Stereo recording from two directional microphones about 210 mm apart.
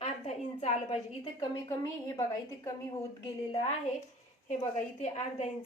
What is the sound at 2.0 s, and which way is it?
Speech, 15° left (ahead or behind).